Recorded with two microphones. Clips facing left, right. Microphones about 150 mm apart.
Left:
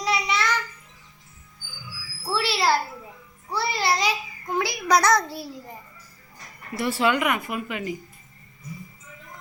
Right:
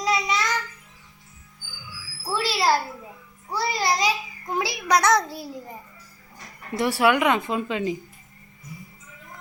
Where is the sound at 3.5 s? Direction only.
15° right (ahead or behind).